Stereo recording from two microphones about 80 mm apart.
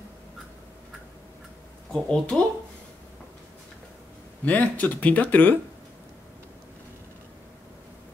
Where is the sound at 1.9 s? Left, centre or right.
Centre.